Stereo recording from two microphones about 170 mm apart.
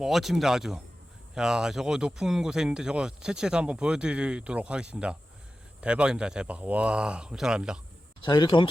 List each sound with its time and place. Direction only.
0.0 s speech: centre (ahead or behind)
8.2 s speech: 25° left (ahead or behind)